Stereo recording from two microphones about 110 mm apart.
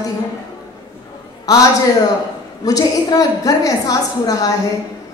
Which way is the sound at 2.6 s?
35° left (ahead or behind).